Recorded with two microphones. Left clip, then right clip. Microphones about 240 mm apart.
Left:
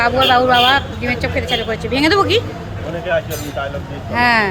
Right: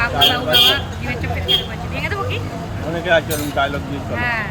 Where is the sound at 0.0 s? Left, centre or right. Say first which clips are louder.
Left 4 dB; centre.